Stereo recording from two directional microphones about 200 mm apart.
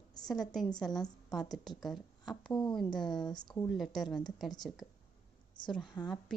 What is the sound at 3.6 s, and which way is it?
Speech, centre (ahead or behind).